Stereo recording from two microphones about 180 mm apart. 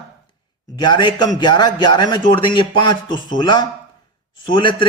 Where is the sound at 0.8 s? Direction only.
25° left (ahead or behind).